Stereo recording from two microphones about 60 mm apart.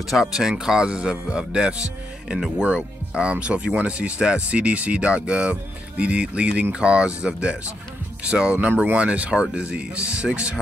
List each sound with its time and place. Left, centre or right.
0.3 s speech: centre